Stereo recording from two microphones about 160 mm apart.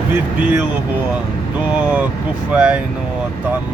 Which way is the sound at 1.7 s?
10° right (ahead or behind).